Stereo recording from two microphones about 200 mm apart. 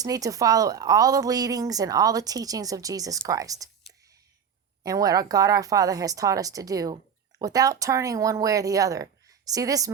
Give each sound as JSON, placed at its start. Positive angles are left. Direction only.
{"t": 0.0, "sound": "speech", "side_deg": -15}
{"t": 4.8, "sound": "speech", "side_deg": -20}